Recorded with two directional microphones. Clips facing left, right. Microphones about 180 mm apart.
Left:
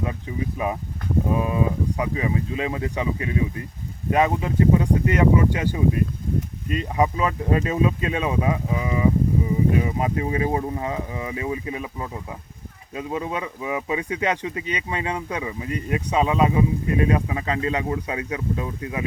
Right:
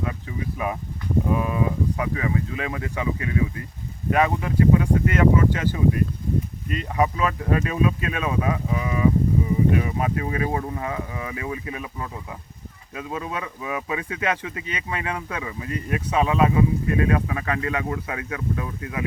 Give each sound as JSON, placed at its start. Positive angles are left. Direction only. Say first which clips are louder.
{"t": 0.0, "sound": "speech", "louder": "left 2 dB", "side_deg": 25}